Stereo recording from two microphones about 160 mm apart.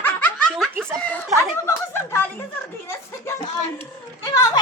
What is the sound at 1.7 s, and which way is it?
Speech, 15° left (ahead or behind).